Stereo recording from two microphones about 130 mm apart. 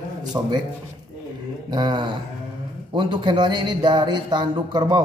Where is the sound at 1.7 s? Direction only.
35° right (ahead or behind).